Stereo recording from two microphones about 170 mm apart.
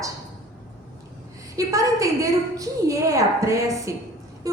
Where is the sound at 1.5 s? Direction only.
20° right (ahead or behind).